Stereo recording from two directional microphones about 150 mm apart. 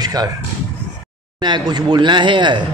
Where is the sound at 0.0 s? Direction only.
25° right (ahead or behind).